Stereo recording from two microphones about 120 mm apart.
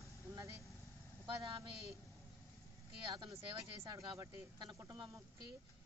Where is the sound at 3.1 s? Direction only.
40° right (ahead or behind).